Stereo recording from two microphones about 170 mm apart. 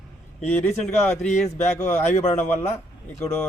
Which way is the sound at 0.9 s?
40° left (ahead or behind).